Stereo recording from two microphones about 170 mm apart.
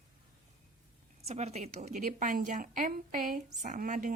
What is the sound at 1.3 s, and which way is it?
A woman's voice, 40° right (ahead or behind).